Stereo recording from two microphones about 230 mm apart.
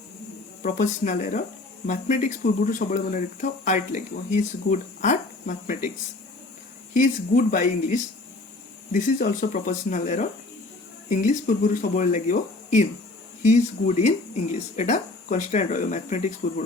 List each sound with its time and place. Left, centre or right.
0.6 s speech: left
6.9 s speech: left